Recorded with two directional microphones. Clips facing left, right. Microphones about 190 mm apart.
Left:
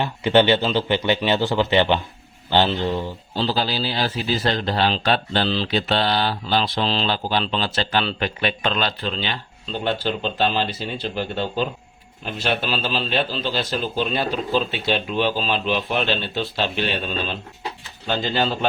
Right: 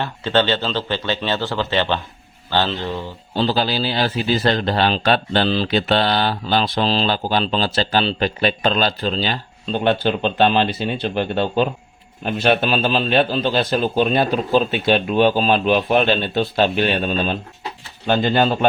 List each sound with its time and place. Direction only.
0.0 s speech: 15° left (ahead or behind)
3.3 s speech: 60° right (ahead or behind); by 9.4 s 40° right (ahead or behind)
9.7 s speech: 60° right (ahead or behind)